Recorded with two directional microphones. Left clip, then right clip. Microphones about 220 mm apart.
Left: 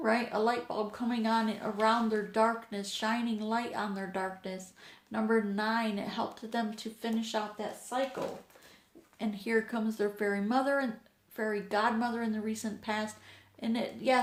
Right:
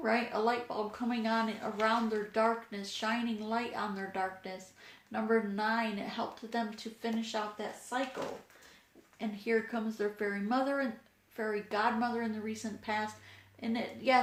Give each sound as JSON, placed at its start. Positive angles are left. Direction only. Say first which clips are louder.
{"t": 0.0, "sound": "speech", "louder": "left 2 dB", "side_deg": 40}
{"t": 9.1, "sound": "speech", "louder": "left 1 dB", "side_deg": 40}